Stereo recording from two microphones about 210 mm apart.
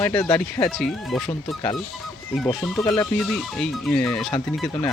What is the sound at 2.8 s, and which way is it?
Speech, 20° left (ahead or behind).